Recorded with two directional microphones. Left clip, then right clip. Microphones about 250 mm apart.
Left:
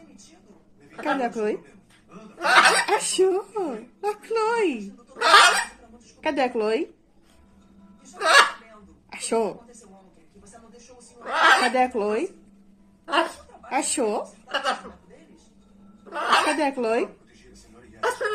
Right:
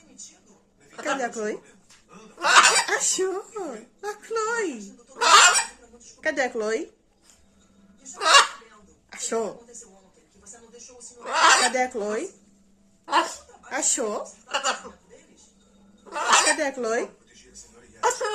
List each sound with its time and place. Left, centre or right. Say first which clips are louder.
0.9 s a sound: left 2 dB; right
1.2 s speech: left 3 dB; centre
2.4 s laughter: even; centre
2.8 s speech: left 4 dB; centre
5.1 s honk: even; centre
6.2 s speech: left 2 dB; centre
8.1 s hiccup: even; centre
9.0 s a sound: left 3 dB; centre
11.2 s a sound: even; right
11.7 s speech: left 3 dB; centre
13.7 s speech: left 2 dB; centre
14.4 s a woman's voice: right 1 dB; centre
16.0 s a sound: right 1 dB; right
16.6 s speech: left 2 dB; centre